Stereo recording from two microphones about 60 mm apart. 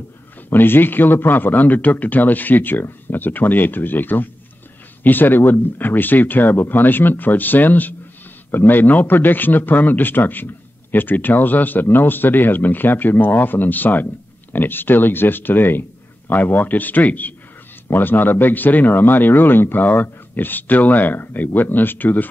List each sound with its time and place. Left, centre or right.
0.5 s a man's voice: left